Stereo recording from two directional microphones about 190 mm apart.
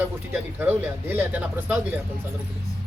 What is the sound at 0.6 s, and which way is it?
Speech, 10° right (ahead or behind).